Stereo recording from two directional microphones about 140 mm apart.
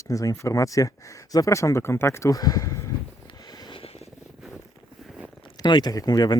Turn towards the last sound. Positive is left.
turn(degrees=25)  # may be behind; listen again after turning